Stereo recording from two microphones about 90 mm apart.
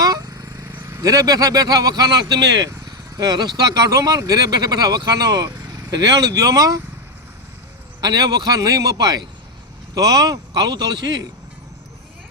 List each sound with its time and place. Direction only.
0.0 s vehicle: 45° right (ahead or behind)
0.7 s speech: 30° right (ahead or behind)
8.0 s speech: 50° right (ahead or behind)